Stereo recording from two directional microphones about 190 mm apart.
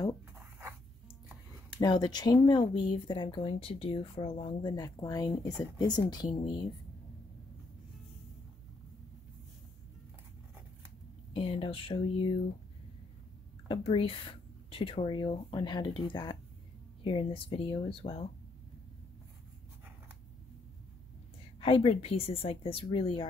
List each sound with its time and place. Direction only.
1.8 s speech: 20° left (ahead or behind)
11.3 s speech: 30° left (ahead or behind)
13.7 s speech: 30° left (ahead or behind)
21.5 s speech: 30° left (ahead or behind)